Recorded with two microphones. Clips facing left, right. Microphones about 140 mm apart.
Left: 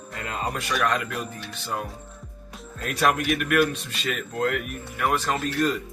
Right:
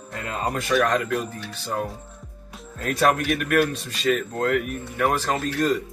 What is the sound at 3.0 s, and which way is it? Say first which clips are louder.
Speech: right 2 dB; 35° right (ahead or behind).